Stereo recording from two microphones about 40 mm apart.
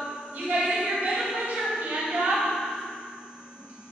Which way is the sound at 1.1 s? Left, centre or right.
Centre.